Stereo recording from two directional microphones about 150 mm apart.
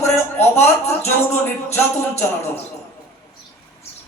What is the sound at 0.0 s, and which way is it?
Speech, 15° left (ahead or behind).